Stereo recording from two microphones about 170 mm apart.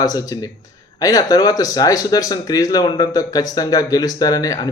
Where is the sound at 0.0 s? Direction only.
20° left (ahead or behind).